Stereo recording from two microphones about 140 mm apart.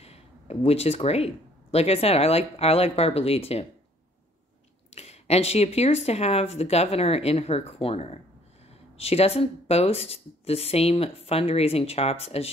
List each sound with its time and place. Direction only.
0.0 s speech: 45° left (ahead or behind)
4.9 s speech: 50° left (ahead or behind)